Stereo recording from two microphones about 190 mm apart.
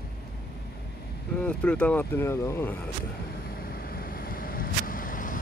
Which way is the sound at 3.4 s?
50° left (ahead or behind).